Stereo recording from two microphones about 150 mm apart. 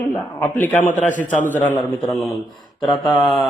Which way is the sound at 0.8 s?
55° left (ahead or behind).